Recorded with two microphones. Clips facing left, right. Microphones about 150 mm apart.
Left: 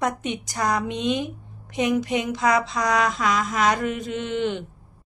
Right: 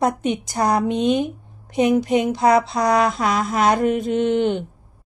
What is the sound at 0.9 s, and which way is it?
A woman's voice, 45° right (ahead or behind).